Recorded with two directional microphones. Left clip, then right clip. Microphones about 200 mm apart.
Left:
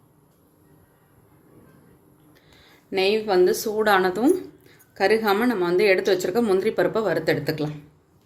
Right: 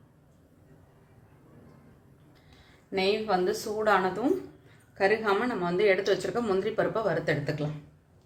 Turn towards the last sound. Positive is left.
turn(degrees=45)  # may be behind; listen again after turning